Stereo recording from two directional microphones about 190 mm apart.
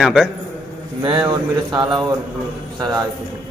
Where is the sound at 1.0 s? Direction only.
25° right (ahead or behind).